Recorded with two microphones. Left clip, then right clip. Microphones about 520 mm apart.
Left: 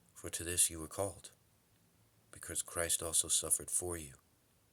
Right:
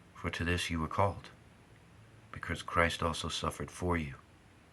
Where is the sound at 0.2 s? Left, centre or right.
Left.